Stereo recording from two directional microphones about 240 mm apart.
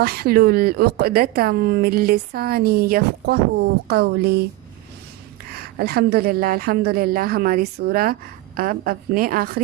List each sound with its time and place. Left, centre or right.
0.0 s speech: right
5.5 s speech: right